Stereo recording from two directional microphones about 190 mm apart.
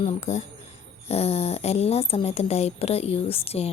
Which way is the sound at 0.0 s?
40° left (ahead or behind).